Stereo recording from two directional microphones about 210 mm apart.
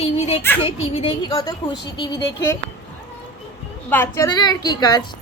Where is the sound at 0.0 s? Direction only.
30° left (ahead or behind).